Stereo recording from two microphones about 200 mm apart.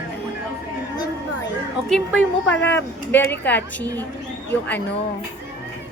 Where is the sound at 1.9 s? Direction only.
5° left (ahead or behind).